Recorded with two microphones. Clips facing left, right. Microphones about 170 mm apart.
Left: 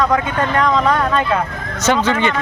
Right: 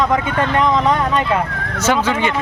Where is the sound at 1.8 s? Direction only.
10° right (ahead or behind).